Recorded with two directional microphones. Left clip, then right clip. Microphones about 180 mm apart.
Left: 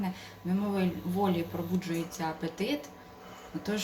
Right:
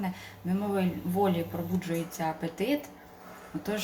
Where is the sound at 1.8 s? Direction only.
30° right (ahead or behind).